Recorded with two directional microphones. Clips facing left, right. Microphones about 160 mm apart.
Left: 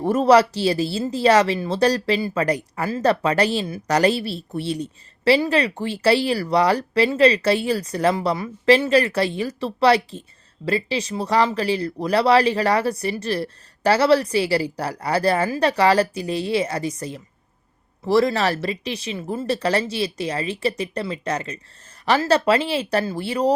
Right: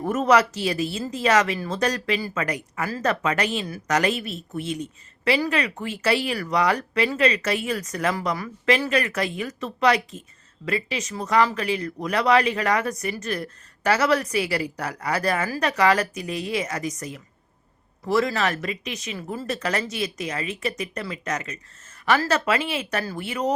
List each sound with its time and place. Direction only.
0.0 s speech: 30° left (ahead or behind)